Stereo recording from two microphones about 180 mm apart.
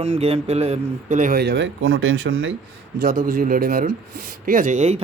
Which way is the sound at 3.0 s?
50° right (ahead or behind).